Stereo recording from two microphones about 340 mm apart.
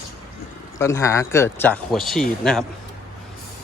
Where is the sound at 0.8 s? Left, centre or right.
Centre.